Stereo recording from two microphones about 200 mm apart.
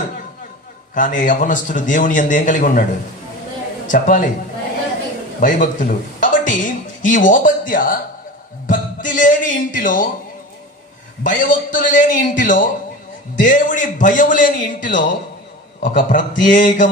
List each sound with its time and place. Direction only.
0.9 s a man's voice: 40° left (ahead or behind)
5.4 s speech: 40° left (ahead or behind)
11.2 s a man's voice: 40° left (ahead or behind)